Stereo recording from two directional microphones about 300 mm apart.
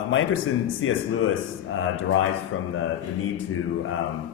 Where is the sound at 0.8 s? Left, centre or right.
Left.